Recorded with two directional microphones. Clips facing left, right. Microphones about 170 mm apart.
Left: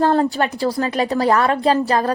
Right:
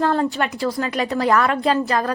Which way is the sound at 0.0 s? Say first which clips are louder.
Left 3 dB; 35° left (ahead or behind).